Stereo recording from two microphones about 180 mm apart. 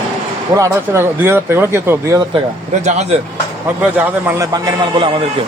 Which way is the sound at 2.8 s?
40° right (ahead or behind).